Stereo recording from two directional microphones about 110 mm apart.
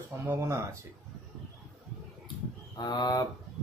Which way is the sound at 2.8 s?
40° left (ahead or behind).